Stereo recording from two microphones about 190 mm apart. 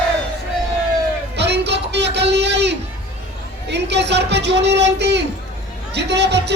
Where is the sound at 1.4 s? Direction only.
65° right (ahead or behind).